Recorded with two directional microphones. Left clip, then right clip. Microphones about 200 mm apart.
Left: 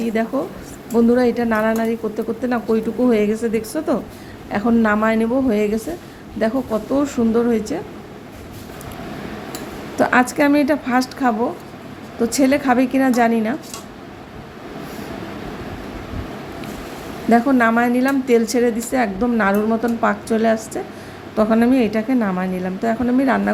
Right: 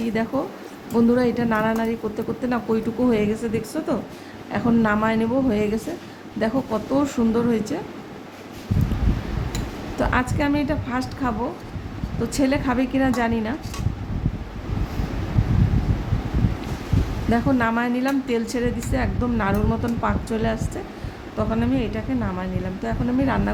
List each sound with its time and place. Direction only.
0.0 s a woman's voice: 10° left (ahead or behind)
10.0 s a woman's voice: 15° left (ahead or behind)
17.3 s a woman's voice: 15° left (ahead or behind)
21.3 s a woman's voice: 25° left (ahead or behind)